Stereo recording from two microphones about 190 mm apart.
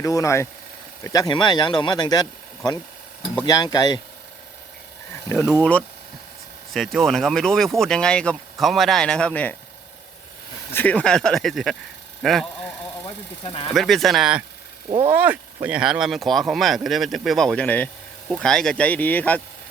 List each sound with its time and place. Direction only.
0.0 s speech: 15° left (ahead or behind)
3.4 s speech: 20° left (ahead or behind)
5.3 s speech: 15° left (ahead or behind)
10.8 s speech: 5° left (ahead or behind)
13.7 s speech: centre (ahead or behind)
14.8 s speech: 30° right (ahead or behind)
15.1 s speech: 10° right (ahead or behind); by 19.4 s 10° left (ahead or behind)